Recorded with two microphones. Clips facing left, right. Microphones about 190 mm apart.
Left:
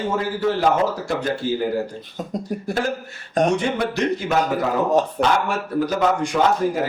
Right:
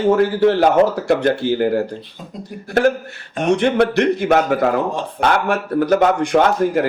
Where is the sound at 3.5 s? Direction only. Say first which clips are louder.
Right 7 dB; 65° right (ahead or behind).